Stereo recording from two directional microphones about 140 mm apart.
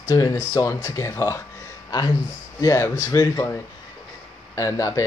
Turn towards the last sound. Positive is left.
turn(degrees=25)  # may be behind; listen again after turning